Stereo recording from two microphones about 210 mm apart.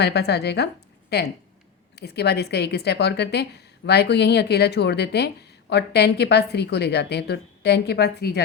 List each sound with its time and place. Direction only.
0.0 s a woman's voice: 50° left (ahead or behind)